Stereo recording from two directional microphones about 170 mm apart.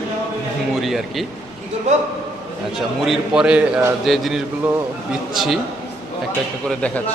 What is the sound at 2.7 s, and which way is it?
A man's voice, 5° right (ahead or behind).